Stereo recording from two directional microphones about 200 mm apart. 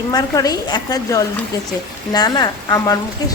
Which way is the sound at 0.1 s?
20° left (ahead or behind).